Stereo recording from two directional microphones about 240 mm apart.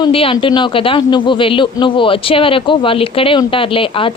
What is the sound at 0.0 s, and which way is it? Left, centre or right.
A man's voice, left.